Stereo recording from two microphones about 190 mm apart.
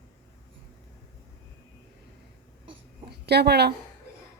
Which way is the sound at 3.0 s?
60° right (ahead or behind).